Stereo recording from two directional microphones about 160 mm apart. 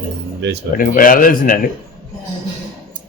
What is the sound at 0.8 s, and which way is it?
Speech, 60° left (ahead or behind).